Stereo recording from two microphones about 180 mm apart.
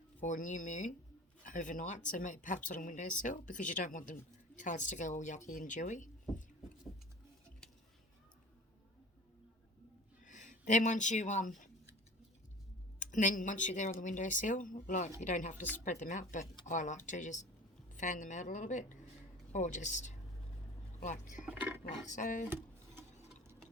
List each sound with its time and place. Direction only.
0.2 s speech: 45° left (ahead or behind)
10.2 s speech: 45° left (ahead or behind)
13.0 s speech: 45° left (ahead or behind)
21.4 s a sound: 10° right (ahead or behind)
22.1 s speech: 45° left (ahead or behind)
23.0 s mechanisms: 10° right (ahead or behind)